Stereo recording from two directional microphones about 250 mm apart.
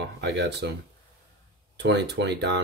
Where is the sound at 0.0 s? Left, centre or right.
Right.